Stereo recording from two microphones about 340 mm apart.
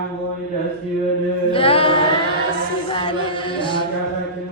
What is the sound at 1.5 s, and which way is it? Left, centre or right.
Music, centre.